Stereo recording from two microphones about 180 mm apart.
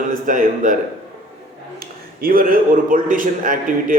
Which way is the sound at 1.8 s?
55° right (ahead or behind).